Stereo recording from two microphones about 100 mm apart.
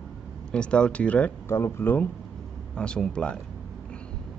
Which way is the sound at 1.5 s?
25° left (ahead or behind).